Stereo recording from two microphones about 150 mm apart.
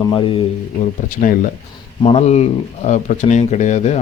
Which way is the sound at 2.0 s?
45° left (ahead or behind).